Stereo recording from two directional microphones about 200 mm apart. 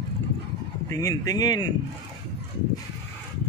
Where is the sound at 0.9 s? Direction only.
15° left (ahead or behind).